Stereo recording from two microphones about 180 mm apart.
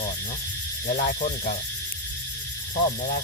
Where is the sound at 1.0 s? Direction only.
45° left (ahead or behind).